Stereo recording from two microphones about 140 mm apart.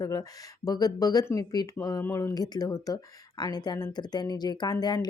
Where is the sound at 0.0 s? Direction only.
25° left (ahead or behind).